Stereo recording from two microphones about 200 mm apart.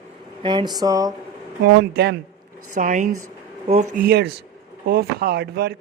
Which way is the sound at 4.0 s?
50° right (ahead or behind).